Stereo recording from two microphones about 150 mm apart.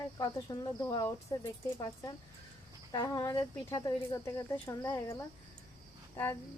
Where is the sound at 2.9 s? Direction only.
25° left (ahead or behind).